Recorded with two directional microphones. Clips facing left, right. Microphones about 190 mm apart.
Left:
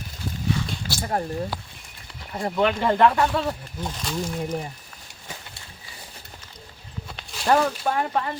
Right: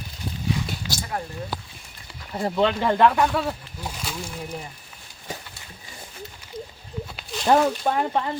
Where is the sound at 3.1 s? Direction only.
Centre (ahead or behind).